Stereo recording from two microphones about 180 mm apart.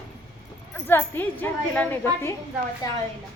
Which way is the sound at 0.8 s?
10° left (ahead or behind).